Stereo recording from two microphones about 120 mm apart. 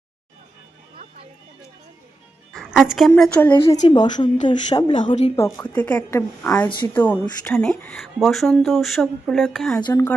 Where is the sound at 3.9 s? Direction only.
40° left (ahead or behind).